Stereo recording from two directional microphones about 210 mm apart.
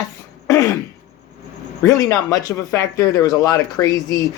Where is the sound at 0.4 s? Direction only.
15° left (ahead or behind).